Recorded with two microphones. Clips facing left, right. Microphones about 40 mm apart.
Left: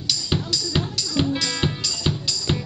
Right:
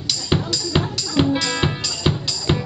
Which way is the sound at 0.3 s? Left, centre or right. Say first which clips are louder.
Right 6 dB; centre.